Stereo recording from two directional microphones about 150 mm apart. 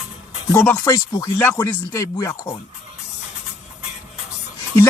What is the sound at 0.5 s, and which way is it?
Speech, 15° left (ahead or behind).